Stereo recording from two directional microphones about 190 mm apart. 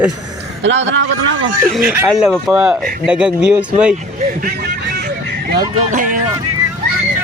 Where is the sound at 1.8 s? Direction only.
10° right (ahead or behind).